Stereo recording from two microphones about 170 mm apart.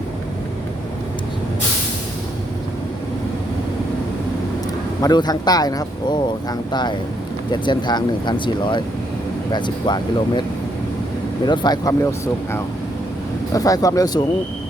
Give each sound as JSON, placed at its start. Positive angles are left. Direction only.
{"t": 5.0, "sound": "speech", "side_deg": 25}
{"t": 11.4, "sound": "speech", "side_deg": 25}